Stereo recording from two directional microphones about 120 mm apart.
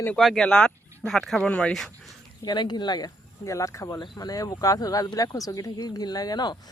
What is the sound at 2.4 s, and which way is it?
Speech, 35° left (ahead or behind).